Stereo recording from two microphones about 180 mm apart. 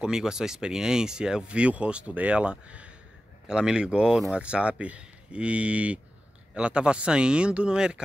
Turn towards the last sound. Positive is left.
turn(degrees=-5)  # may be behind; listen again after turning